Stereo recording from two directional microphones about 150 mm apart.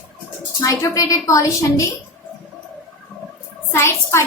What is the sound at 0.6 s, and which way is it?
A woman's voice, 20° left (ahead or behind).